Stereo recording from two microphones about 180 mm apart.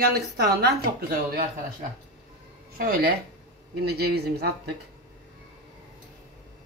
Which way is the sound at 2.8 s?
60° right (ahead or behind).